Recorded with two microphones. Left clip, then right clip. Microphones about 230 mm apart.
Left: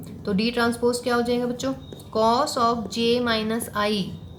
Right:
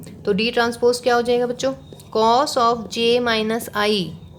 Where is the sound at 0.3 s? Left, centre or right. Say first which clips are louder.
Right 5 dB; right.